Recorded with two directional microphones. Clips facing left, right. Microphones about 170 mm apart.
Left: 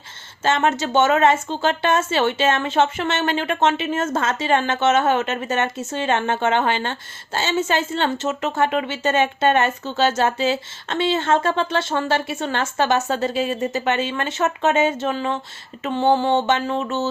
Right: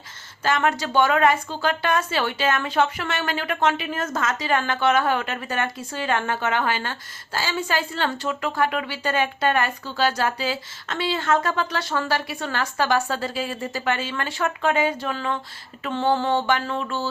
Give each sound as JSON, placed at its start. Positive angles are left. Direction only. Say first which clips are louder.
{"t": 0.4, "sound": "a woman's voice", "louder": "left 3 dB", "side_deg": 25}